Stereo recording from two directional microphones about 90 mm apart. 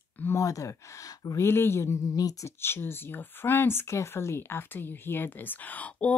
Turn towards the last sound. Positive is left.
turn(degrees=15)  # may be behind; listen again after turning